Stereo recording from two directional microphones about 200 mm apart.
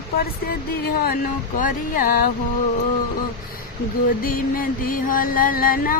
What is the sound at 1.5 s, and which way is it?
Music, 45° left (ahead or behind).